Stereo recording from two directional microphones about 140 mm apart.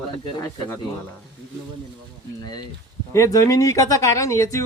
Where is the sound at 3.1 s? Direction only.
20° left (ahead or behind).